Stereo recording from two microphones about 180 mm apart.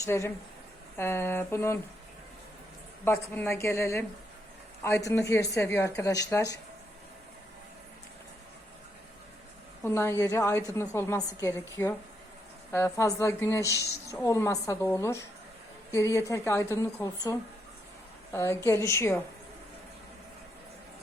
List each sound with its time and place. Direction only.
0.0 s a woman's voice: 15° left (ahead or behind)
3.0 s a woman's voice: 10° left (ahead or behind)
9.8 s a woman's voice: 15° left (ahead or behind)